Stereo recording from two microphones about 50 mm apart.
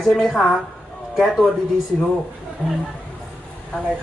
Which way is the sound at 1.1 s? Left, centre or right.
Centre.